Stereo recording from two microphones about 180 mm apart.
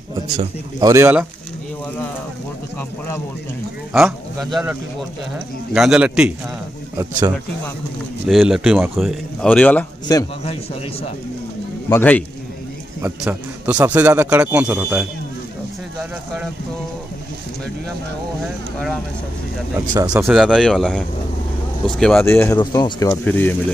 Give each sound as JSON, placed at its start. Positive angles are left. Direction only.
{"t": 0.7, "sound": "a man's voice", "side_deg": -15}
{"t": 3.9, "sound": "speech", "side_deg": 0}
{"t": 7.0, "sound": "speech", "side_deg": -20}
{"t": 8.3, "sound": "speech", "side_deg": 0}
{"t": 10.1, "sound": "speech", "side_deg": 20}
{"t": 11.9, "sound": "a man's voice", "side_deg": 10}
{"t": 13.0, "sound": "a man's voice", "side_deg": -10}
{"t": 18.4, "sound": "speech", "side_deg": 0}
{"t": 19.9, "sound": "speech", "side_deg": -20}
{"t": 20.3, "sound": "speech", "side_deg": 0}
{"t": 22.2, "sound": "speech", "side_deg": 15}
{"t": 23.2, "sound": "a man's voice", "side_deg": 10}